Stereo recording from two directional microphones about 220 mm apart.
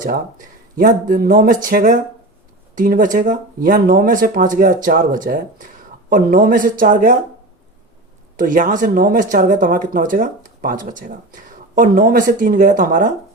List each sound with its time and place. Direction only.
0.8 s speech: 40° right (ahead or behind)
8.4 s speech: 35° right (ahead or behind)